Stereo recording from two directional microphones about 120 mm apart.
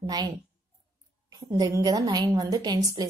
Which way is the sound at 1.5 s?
25° right (ahead or behind).